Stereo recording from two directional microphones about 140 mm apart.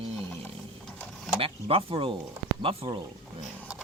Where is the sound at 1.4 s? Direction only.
40° right (ahead or behind).